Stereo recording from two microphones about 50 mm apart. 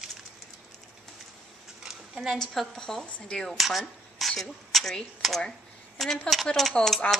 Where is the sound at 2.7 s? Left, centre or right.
Centre.